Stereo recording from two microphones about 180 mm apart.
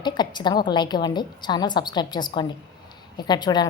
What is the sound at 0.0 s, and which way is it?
A woman's voice, 25° left (ahead or behind).